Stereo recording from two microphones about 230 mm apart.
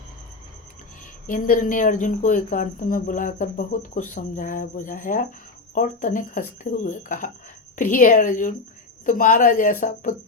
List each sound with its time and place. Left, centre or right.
1.3 s speech: left